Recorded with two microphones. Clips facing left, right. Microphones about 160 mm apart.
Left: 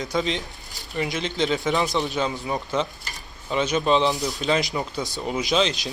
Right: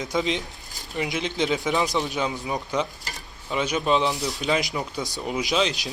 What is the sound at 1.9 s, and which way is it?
Speech, 20° left (ahead or behind).